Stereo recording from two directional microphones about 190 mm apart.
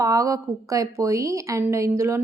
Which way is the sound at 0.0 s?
15° right (ahead or behind).